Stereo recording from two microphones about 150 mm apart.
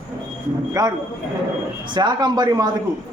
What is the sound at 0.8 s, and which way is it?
Speech, 25° right (ahead or behind).